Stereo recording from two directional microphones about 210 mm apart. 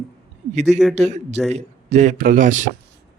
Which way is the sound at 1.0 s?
30° right (ahead or behind).